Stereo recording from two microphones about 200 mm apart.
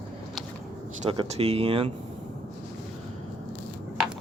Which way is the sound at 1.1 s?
25° right (ahead or behind).